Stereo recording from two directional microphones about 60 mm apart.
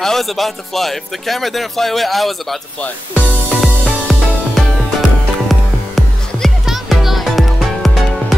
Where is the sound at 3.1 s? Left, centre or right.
Right.